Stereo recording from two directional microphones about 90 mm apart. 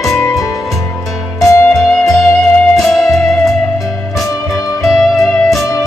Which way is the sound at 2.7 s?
Centre (ahead or behind).